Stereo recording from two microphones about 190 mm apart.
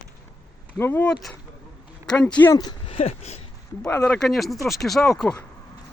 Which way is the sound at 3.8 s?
10° left (ahead or behind).